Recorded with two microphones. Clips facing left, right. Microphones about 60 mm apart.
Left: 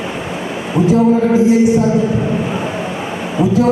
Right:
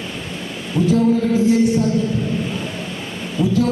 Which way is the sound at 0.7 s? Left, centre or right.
Left.